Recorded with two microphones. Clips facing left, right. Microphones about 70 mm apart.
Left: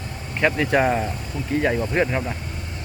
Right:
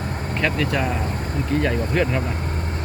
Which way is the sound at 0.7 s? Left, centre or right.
Left.